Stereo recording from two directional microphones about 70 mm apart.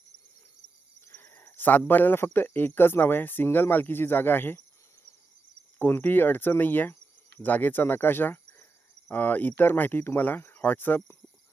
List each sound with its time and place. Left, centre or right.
1.1 s a sound: left
1.9 s speech: left
5.8 s speech: left